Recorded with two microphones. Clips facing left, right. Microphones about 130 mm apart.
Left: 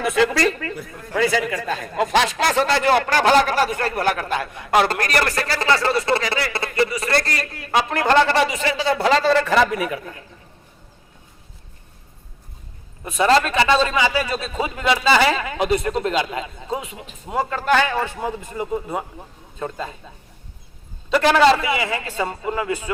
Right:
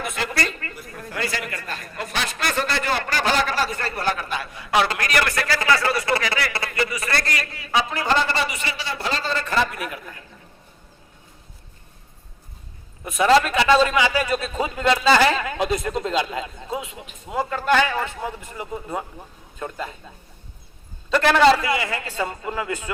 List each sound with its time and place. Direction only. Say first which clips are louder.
0.2 s speech: left 9 dB; 90° left
1.9 s a man's voice: left 11 dB; 90° left; by 7.4 s 35° left (ahead or behind)
7.5 s a man's voice: left 4 dB; 55° left (ahead or behind); by 9.6 s 90° left
13.2 s speech: even; 5° right (ahead or behind)
13.8 s a man's voice: even; 25° left (ahead or behind)
14.5 s a man's voice: left 1 dB; 10° left (ahead or behind)
17.8 s a man's voice: left 3 dB; 15° left (ahead or behind)
21.1 s a man's voice: left 1 dB; 15° left (ahead or behind)